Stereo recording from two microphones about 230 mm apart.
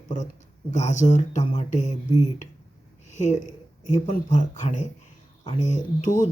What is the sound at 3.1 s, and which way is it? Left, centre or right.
Speech, left.